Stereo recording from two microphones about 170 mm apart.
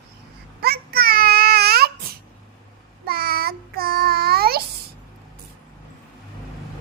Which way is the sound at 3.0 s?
65° right (ahead or behind).